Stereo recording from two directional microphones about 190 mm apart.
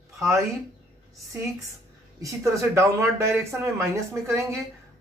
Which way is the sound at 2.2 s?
15° right (ahead or behind).